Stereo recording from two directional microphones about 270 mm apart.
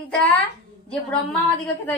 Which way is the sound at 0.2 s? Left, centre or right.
Centre.